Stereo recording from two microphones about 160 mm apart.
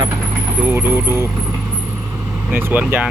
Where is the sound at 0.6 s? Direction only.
15° right (ahead or behind).